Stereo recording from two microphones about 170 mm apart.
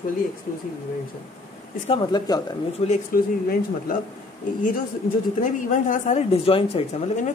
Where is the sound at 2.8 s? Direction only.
35° left (ahead or behind).